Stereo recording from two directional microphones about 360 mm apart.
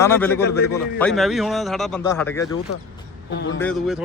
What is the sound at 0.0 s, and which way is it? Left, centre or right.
A man's voice, centre.